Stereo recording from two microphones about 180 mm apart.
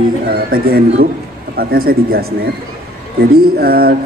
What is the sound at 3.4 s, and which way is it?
Speech, 60° right (ahead or behind).